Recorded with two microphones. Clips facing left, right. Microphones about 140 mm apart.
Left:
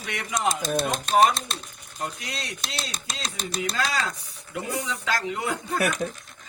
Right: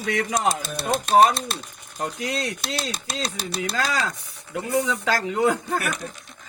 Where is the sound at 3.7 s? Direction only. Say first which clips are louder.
Right 4 dB; 45° right (ahead or behind).